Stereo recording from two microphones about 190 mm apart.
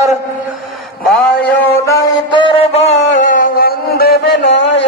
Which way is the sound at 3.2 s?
45° left (ahead or behind).